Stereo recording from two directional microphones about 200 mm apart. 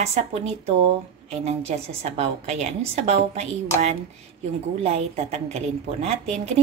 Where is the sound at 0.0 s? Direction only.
30° right (ahead or behind).